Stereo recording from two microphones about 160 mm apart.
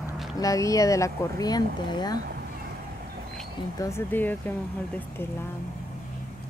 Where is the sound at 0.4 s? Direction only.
20° left (ahead or behind).